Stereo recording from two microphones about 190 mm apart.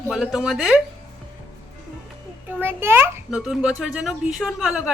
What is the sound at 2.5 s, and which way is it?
A child's voice, 10° right (ahead or behind).